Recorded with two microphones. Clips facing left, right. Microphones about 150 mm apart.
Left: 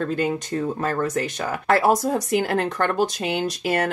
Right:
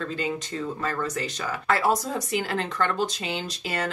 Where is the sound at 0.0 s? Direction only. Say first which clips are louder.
Left 6 dB; 55° left (ahead or behind).